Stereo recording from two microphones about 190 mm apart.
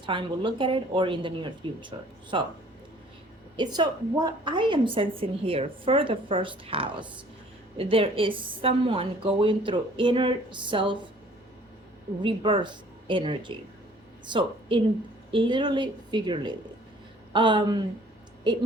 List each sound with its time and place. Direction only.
0.0 s a woman's voice: 25° right (ahead or behind)
3.6 s a woman's voice: 20° right (ahead or behind)
12.2 s a woman's voice: 25° right (ahead or behind)